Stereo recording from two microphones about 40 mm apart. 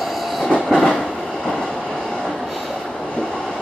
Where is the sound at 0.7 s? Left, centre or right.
Centre.